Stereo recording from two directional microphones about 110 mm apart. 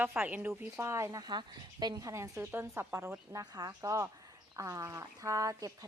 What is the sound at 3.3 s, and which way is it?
Speech, 35° right (ahead or behind).